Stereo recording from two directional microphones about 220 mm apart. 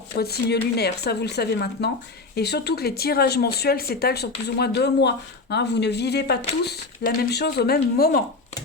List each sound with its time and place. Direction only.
0.2 s speech: 45° left (ahead or behind)